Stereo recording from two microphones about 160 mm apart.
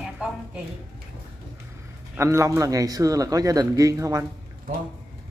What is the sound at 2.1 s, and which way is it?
Speech, 15° right (ahead or behind).